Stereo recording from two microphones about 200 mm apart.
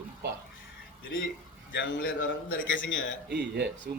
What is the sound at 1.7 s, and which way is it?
A man's voice, 65° left (ahead or behind).